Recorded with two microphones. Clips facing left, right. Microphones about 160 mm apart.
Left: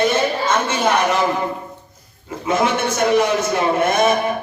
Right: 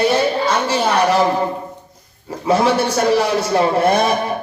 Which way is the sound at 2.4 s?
35° right (ahead or behind).